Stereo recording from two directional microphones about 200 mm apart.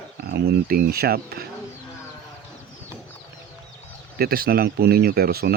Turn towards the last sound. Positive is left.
turn(degrees=-50)  # may be behind; listen again after turning